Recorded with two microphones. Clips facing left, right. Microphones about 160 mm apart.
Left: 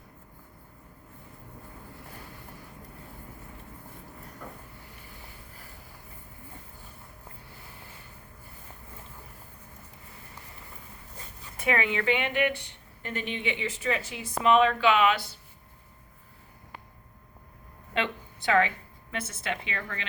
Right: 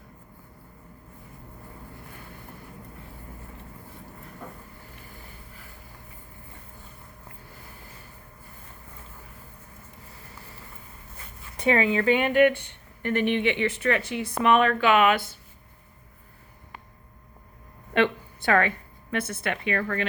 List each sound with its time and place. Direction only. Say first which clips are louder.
11.6 s a woman's voice: right 5 dB; 35° right (ahead or behind); by 15.3 s 50° right (ahead or behind)
17.9 s a sound: right 8 dB; 55° right (ahead or behind)
19.1 s a woman's voice: right 5 dB; 60° right (ahead or behind)